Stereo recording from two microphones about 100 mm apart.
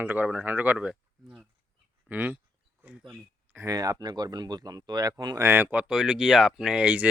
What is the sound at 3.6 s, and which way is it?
Speech, 35° right (ahead or behind).